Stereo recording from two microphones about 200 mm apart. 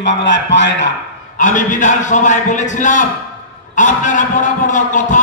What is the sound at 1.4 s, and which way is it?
A man's voice, 40° left (ahead or behind).